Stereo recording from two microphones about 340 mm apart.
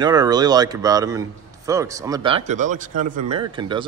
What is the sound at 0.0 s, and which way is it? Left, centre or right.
Speech, centre.